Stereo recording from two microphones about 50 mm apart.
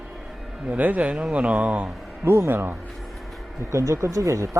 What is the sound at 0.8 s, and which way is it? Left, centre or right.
Speech, right.